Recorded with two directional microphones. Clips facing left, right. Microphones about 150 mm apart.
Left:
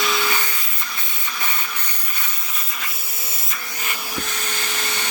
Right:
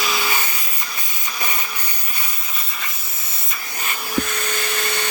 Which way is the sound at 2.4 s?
Centre (ahead or behind).